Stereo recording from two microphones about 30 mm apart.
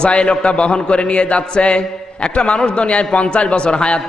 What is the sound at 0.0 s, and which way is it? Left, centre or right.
A man's voice, left.